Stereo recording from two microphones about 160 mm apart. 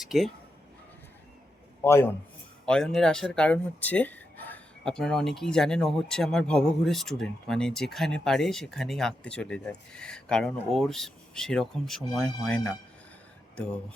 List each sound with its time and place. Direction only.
0.0 s speech: centre (ahead or behind)
1.8 s a man's voice: 15° left (ahead or behind)
2.6 s speech: 5° left (ahead or behind)